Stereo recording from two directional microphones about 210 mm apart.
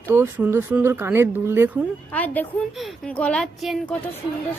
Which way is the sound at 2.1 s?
5° left (ahead or behind).